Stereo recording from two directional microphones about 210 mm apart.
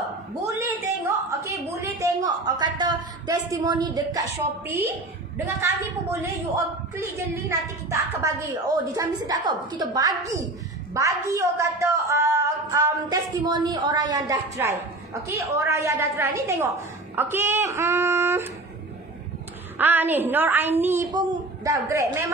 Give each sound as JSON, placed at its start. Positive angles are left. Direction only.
{"t": 0.6, "sound": "a sound", "side_deg": -15}
{"t": 5.6, "sound": "a woman's voice", "side_deg": -15}
{"t": 7.3, "sound": "a woman's voice", "side_deg": -10}
{"t": 19.8, "sound": "a woman's voice", "side_deg": -10}